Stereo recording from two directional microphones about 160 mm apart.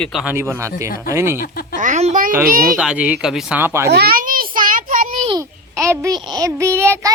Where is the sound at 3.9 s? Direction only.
80° right; by 5.2 s 60° right (ahead or behind).